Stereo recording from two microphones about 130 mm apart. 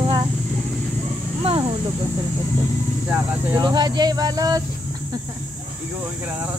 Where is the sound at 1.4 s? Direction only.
45° right (ahead or behind).